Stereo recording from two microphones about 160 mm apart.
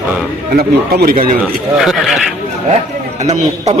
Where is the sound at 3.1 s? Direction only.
45° right (ahead or behind).